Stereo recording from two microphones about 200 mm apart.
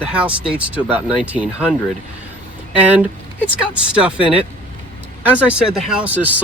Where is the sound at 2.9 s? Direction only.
5° right (ahead or behind).